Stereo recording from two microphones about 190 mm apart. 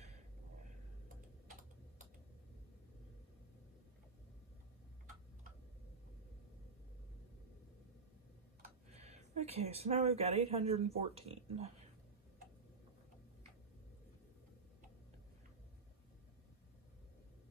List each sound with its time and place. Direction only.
1.0 s typing: 45° right (ahead or behind)
8.9 s speech: 35° right (ahead or behind)